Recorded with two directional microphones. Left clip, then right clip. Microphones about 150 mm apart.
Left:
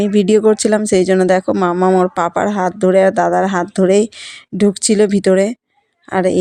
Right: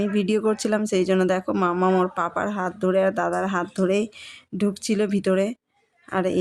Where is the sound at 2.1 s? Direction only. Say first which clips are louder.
Left 9 dB; 45° left (ahead or behind).